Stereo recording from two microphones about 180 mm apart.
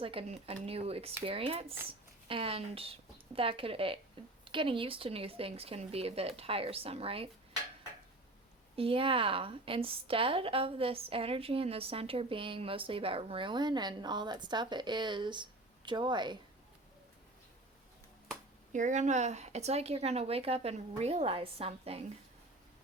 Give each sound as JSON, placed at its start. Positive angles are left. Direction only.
{"t": 0.0, "sound": "speech", "side_deg": -30}
{"t": 8.7, "sound": "a woman's voice", "side_deg": -30}
{"t": 18.7, "sound": "speech", "side_deg": -45}